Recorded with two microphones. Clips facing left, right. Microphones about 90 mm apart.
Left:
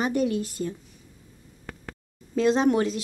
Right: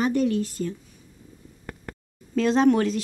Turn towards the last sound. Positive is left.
turn(degrees=5)  # may be behind; listen again after turning